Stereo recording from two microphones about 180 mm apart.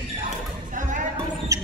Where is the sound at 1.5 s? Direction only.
20° right (ahead or behind).